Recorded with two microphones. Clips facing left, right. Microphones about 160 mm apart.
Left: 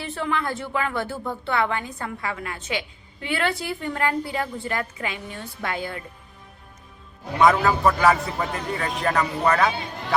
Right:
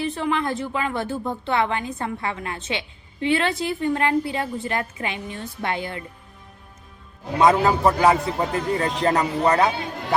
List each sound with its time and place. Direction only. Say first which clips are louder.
0.0 s a woman's voice: right 3 dB; 15° right (ahead or behind)
7.3 s a woman's voice: right 1 dB; 25° right (ahead or behind)